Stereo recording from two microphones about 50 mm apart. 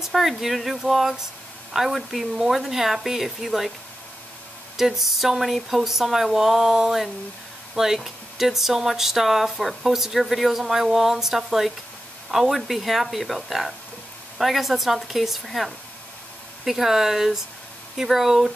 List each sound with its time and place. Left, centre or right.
0.0 s speech: centre
4.7 s speech: centre